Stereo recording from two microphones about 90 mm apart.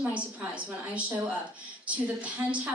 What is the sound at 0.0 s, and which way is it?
A woman's voice, 15° right (ahead or behind).